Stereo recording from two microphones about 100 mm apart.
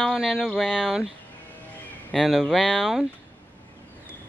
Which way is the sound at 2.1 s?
Centre (ahead or behind).